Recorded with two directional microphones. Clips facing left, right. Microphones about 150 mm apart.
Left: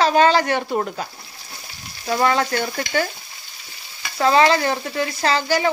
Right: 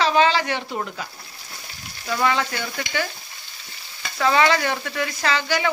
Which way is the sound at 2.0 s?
40° left (ahead or behind).